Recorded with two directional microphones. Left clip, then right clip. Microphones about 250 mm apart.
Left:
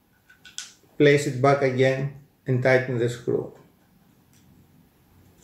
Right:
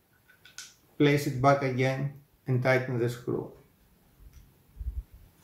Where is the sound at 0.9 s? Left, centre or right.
Centre.